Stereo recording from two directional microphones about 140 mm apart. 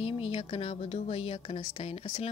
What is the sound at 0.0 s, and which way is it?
A woman's voice, 45° left (ahead or behind).